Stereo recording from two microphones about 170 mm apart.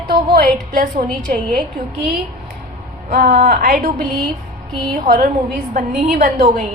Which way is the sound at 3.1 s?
60° right (ahead or behind).